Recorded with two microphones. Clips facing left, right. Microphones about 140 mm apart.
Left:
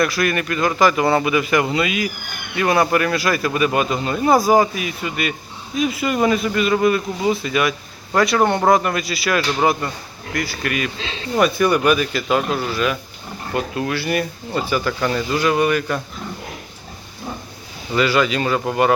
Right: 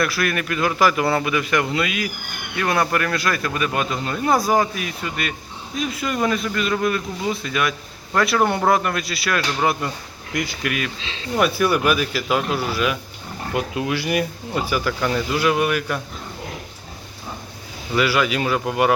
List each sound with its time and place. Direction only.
0.0 s speech: centre (ahead or behind)
10.3 s speech: 20° right (ahead or behind)
10.6 s speech: centre (ahead or behind)
17.9 s speech: 5° right (ahead or behind)